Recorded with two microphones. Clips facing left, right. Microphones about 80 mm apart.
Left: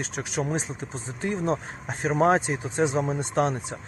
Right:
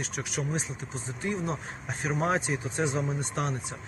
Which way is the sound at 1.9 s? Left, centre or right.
Left.